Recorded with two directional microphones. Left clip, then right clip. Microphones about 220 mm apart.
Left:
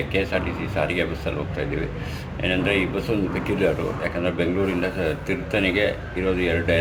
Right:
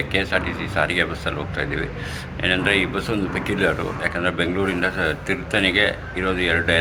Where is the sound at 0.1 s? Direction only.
5° left (ahead or behind).